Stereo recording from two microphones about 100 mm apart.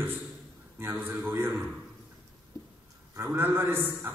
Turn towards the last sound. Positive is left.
turn(degrees=-20)  # may be behind; listen again after turning